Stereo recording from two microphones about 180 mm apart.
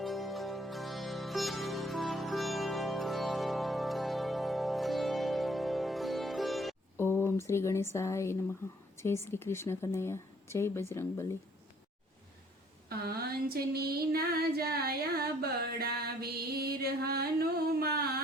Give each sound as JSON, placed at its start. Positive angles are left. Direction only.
{"t": 0.0, "sound": "music", "side_deg": 0}
{"t": 6.9, "sound": "a sound", "side_deg": 10}
{"t": 7.9, "sound": "speech", "side_deg": 15}
{"t": 12.9, "sound": "female singing", "side_deg": -60}